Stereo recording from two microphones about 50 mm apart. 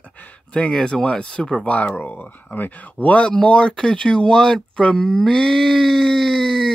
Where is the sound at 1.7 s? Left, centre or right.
Left.